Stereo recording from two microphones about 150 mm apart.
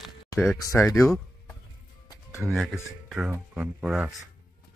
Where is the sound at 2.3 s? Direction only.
15° left (ahead or behind).